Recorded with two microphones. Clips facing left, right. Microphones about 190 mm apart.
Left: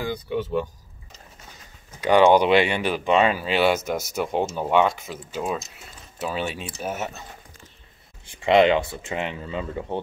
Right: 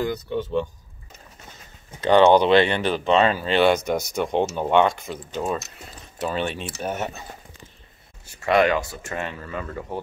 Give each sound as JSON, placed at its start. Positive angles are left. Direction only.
{"t": 0.0, "sound": "speech", "side_deg": 10}
{"t": 2.0, "sound": "speech", "side_deg": 10}
{"t": 8.5, "sound": "speech", "side_deg": 20}